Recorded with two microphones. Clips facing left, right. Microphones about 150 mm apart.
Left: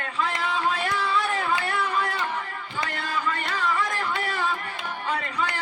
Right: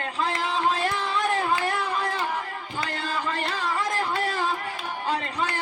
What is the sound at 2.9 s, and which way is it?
Music, 35° right (ahead or behind).